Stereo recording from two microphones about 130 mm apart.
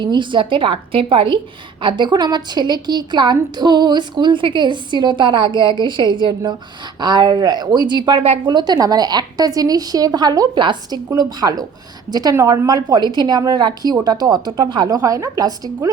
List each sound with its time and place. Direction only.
0.0 s a woman's voice: 35° right (ahead or behind)